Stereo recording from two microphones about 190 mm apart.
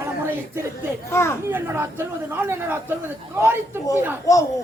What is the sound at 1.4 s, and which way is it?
Speech, 10° right (ahead or behind).